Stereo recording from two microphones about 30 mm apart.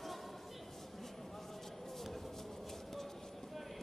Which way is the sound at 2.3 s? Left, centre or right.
Centre.